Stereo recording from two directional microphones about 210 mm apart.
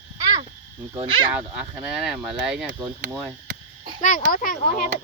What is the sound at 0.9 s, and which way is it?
Speech, 25° right (ahead or behind).